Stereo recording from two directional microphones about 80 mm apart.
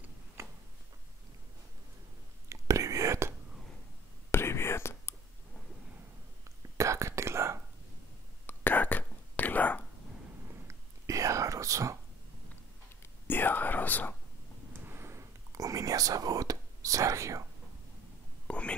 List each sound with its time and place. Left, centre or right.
0.4 s tick-tock: right
2.5 s whispering: right
4.3 s whispering: left
6.8 s whispering: right
8.5 s whispering: left
10.5 s whispering: right
13.0 s whispering: left
14.7 s whispering: right
18.5 s whispering: centre